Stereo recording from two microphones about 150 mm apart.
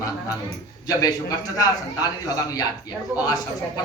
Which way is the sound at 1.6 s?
25° left (ahead or behind).